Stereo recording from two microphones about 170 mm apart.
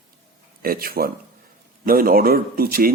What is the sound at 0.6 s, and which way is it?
Speech, 60° right (ahead or behind).